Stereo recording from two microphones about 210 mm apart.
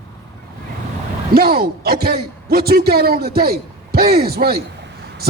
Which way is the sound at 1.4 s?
45° right (ahead or behind).